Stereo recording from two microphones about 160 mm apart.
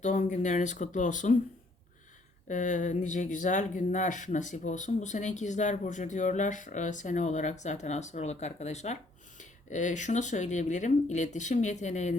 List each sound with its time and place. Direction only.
0.0 s speech: 50° left (ahead or behind)
2.5 s speech: 50° left (ahead or behind)